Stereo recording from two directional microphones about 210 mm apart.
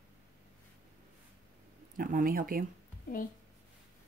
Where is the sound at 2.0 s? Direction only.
40° right (ahead or behind).